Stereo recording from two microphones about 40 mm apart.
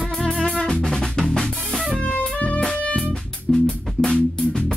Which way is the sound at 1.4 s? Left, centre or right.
Centre.